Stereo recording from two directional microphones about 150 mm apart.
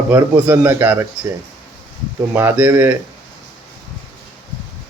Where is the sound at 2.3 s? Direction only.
15° right (ahead or behind).